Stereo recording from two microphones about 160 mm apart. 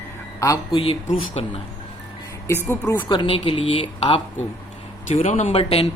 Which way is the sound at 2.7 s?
15° left (ahead or behind).